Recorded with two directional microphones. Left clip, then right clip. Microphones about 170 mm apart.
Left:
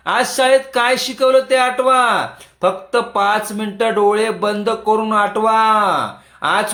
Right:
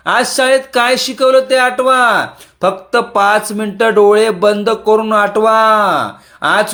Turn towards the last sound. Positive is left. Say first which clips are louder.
# right 4 dB
turn(degrees=-35)  # may be behind; listen again after turning